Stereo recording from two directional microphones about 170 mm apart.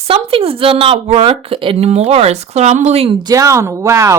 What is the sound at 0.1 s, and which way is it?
Speech, 35° right (ahead or behind).